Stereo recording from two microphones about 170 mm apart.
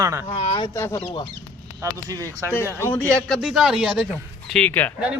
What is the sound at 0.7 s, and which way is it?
Speech, 15° left (ahead or behind).